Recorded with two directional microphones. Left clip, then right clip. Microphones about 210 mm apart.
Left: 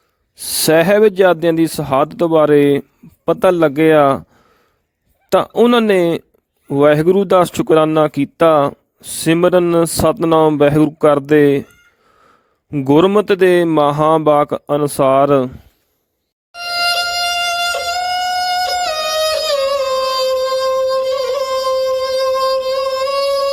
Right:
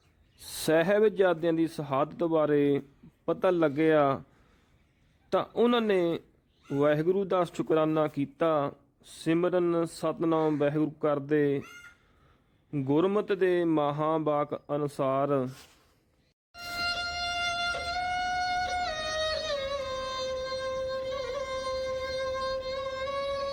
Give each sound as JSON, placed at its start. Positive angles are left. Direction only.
{"t": 0.5, "sound": "speech", "side_deg": 45}
{"t": 5.3, "sound": "speech", "side_deg": 45}
{"t": 12.7, "sound": "speech", "side_deg": 45}
{"t": 16.5, "sound": "music", "side_deg": 45}